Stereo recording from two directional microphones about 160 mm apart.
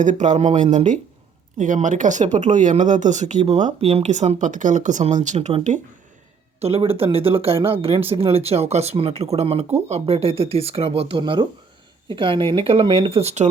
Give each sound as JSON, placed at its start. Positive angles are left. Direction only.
{"t": 0.0, "sound": "speech", "side_deg": -50}
{"t": 6.6, "sound": "speech", "side_deg": -35}